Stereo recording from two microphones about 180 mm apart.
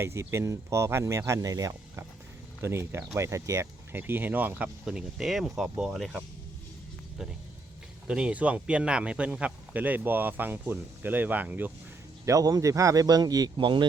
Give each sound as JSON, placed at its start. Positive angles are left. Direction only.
{"t": 0.0, "sound": "speech", "side_deg": -15}